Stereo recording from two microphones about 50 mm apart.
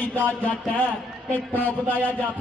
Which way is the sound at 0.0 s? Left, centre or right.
Left.